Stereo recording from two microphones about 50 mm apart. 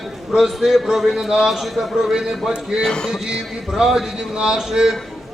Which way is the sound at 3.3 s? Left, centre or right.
Centre.